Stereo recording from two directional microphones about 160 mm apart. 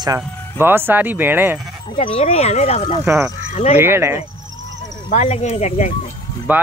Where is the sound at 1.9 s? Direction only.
35° left (ahead or behind).